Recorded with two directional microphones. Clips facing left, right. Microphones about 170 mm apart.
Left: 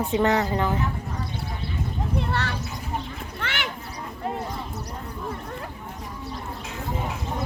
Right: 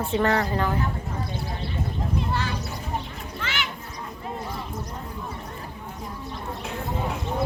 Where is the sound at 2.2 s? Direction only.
70° left (ahead or behind).